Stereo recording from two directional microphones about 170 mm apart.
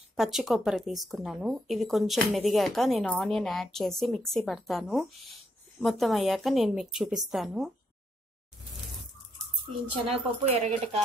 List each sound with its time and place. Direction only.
0.1 s speech: centre (ahead or behind)
10.0 s speech: 35° right (ahead or behind)